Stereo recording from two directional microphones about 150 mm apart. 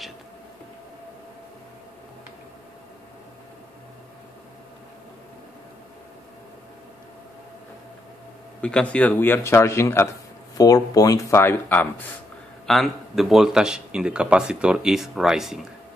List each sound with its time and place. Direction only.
8.5 s speech: 5° left (ahead or behind)
12.6 s speech: centre (ahead or behind)